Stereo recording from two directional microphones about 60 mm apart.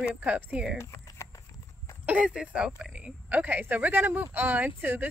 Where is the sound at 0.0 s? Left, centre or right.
Right.